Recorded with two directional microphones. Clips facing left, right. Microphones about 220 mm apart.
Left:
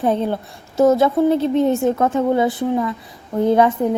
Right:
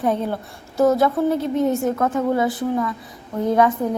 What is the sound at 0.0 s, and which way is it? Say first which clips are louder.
A woman's voice: left 3 dB; 25° left (ahead or behind).